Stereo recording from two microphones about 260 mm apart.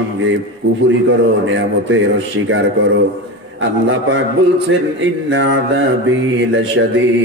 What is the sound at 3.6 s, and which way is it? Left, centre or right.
Mantra, right.